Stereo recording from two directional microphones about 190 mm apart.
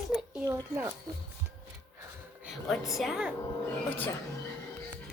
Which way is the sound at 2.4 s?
Centre (ahead or behind).